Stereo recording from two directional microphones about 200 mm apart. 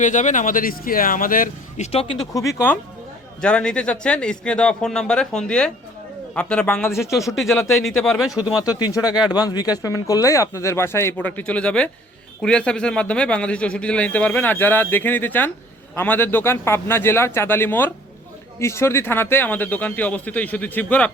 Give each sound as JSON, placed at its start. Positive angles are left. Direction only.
{"t": 0.0, "sound": "speech", "side_deg": 40}
{"t": 1.9, "sound": "speech", "side_deg": 30}
{"t": 2.3, "sound": "a man's voice", "side_deg": 15}
{"t": 8.8, "sound": "a man's voice", "side_deg": 20}